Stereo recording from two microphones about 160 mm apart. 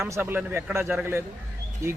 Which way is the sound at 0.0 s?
15° right (ahead or behind).